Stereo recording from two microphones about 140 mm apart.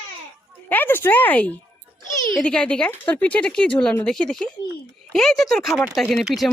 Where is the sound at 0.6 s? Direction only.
15° left (ahead or behind).